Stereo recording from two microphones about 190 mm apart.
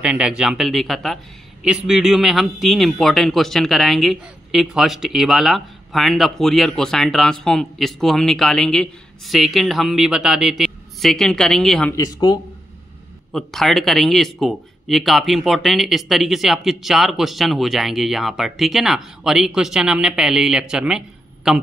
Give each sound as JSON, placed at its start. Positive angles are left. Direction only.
{"t": 0.0, "sound": "a man's voice", "side_deg": -5}
{"t": 11.9, "sound": "speech", "side_deg": 20}
{"t": 13.3, "sound": "a man's voice", "side_deg": 0}